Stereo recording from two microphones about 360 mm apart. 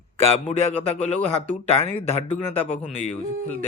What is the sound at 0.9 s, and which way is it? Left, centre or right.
Speech, centre.